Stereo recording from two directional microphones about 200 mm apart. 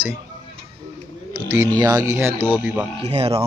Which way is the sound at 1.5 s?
15° right (ahead or behind).